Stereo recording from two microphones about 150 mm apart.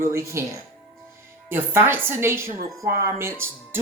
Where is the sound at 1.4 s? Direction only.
15° right (ahead or behind).